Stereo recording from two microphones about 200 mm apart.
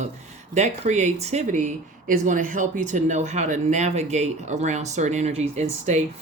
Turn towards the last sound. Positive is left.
turn(degrees=-35)  # may be behind; listen again after turning